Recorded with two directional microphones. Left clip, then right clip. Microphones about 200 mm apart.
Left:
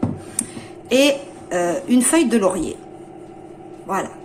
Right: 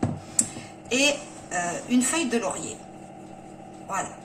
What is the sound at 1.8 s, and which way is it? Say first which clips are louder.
Speech: left 8 dB; 50° left (ahead or behind).